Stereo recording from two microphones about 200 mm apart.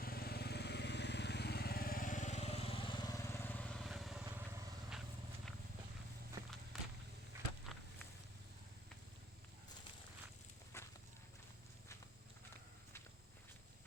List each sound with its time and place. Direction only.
0.0 s lawn mower: 50° left (ahead or behind); by 5.0 s 5° right (ahead or behind)
7.3 s walk: 15° right (ahead or behind)
7.7 s walk: centre (ahead or behind)
10.7 s walk: 15° left (ahead or behind)